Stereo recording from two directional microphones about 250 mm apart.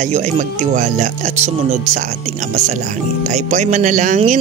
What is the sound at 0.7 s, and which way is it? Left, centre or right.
Speech, right.